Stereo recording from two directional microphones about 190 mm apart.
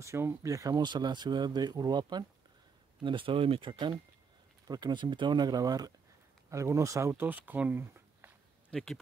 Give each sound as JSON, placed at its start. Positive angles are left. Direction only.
{"t": 0.0, "sound": "speech", "side_deg": -15}
{"t": 8.6, "sound": "speech", "side_deg": 5}